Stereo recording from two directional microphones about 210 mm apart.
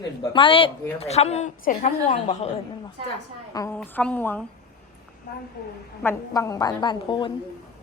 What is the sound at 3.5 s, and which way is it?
Speech, 15° left (ahead or behind).